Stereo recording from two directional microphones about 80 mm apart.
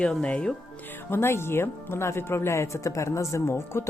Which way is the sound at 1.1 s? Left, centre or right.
Left.